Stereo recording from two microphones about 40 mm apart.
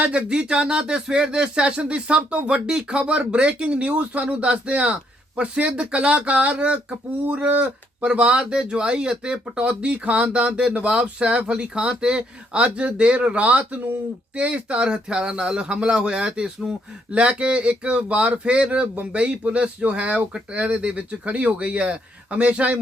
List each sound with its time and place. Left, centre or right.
0.1 s speech: right